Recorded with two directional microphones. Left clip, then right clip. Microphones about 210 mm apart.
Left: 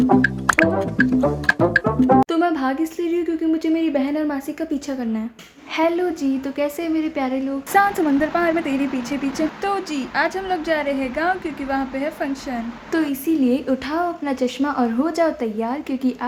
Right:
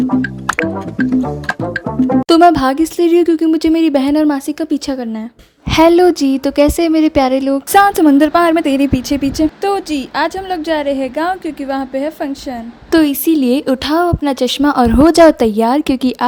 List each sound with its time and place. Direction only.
1.1 s music: centre (ahead or behind)
2.2 s a woman's voice: 40° right (ahead or behind)